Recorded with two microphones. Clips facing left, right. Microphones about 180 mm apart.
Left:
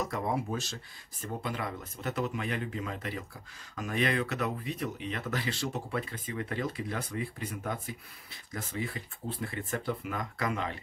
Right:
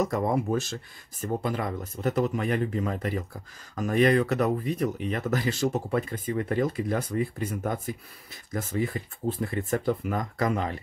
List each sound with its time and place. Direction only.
0.0 s speech: 45° right (ahead or behind)